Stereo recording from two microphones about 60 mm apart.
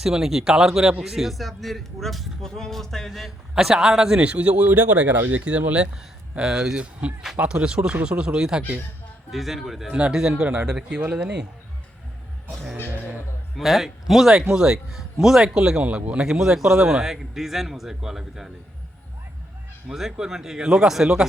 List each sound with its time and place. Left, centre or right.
0.0 s a man's voice: centre
3.5 s a man's voice: centre
13.6 s a man's voice: centre
19.9 s a man's voice: centre